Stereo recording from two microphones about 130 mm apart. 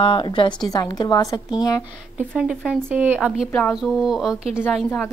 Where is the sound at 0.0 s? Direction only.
40° left (ahead or behind).